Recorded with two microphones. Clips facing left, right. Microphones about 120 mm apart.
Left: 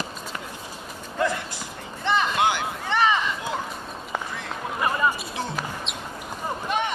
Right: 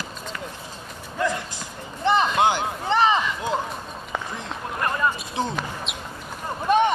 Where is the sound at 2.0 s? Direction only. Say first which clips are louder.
Right 3 dB; 30° right (ahead or behind).